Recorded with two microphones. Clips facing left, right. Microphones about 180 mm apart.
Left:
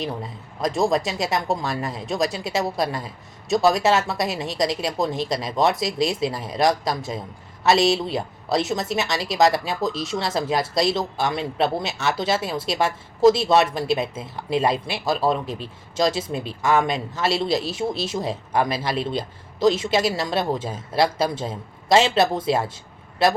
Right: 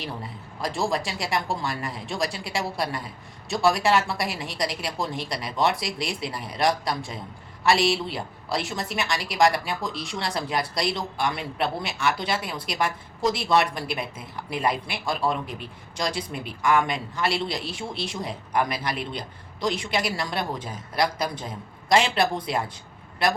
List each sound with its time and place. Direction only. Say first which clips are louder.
0.0 s a woman's voice: left 5 dB; 20° left (ahead or behind)